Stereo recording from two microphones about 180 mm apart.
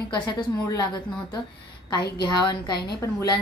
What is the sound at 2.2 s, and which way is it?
A woman's voice, 20° left (ahead or behind).